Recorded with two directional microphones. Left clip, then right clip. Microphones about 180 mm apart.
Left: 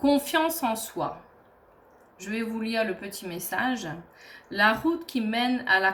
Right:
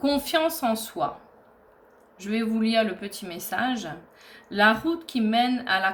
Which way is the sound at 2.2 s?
40° right (ahead or behind).